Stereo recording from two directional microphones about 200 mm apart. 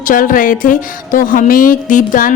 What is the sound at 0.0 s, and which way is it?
Speech, 45° left (ahead or behind).